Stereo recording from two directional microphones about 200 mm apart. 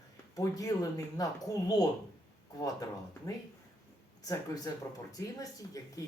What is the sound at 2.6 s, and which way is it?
Speech, 15° left (ahead or behind).